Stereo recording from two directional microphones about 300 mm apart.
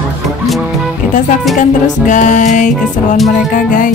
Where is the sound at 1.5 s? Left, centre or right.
Left.